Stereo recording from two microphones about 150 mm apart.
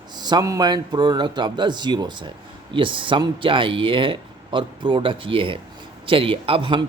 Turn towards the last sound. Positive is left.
turn(degrees=-35)  # may be behind; listen again after turning